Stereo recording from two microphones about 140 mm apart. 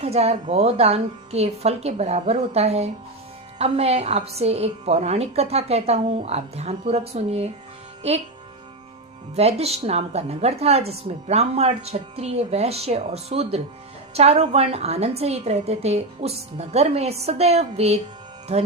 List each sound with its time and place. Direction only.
0.0 s speech: 50° right (ahead or behind)
9.3 s speech: 50° right (ahead or behind)